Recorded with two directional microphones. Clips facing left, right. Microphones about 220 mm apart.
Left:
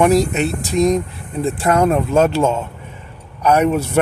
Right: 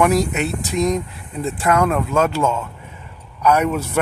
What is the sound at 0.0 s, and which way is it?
Speech, 25° left (ahead or behind).